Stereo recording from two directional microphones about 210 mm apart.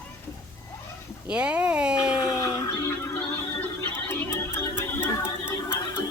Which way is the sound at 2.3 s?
15° left (ahead or behind).